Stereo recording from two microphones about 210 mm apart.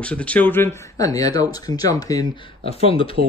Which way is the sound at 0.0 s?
5° left (ahead or behind).